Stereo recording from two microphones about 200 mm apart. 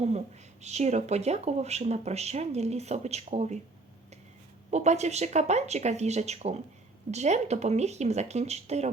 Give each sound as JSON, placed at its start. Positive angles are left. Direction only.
{"t": 0.6, "sound": "speech", "side_deg": -35}
{"t": 4.7, "sound": "speech", "side_deg": -35}